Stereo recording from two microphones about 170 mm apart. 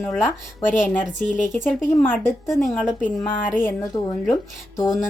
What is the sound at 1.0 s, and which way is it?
Speech, 50° left (ahead or behind).